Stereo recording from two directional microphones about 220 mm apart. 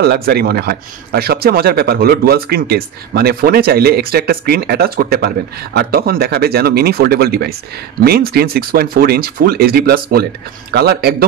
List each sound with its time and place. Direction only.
0.0 s speech: 45° right (ahead or behind)